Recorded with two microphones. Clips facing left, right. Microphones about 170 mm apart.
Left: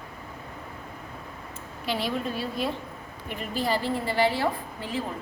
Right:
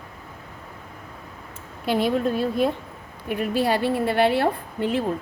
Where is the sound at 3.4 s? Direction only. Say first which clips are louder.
Right 6 dB; 65° right (ahead or behind).